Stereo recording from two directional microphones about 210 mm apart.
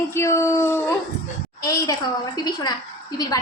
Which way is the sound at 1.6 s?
15° left (ahead or behind).